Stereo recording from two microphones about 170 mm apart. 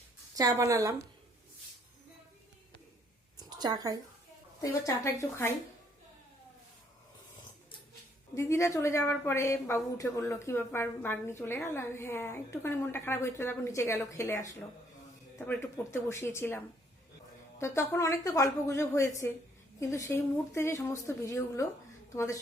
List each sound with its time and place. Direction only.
0.3 s a woman's voice: 20° right (ahead or behind)
3.3 s a sound: 25° right (ahead or behind)
4.6 s speech: 20° left (ahead or behind)
8.4 s a woman's voice: 15° left (ahead or behind)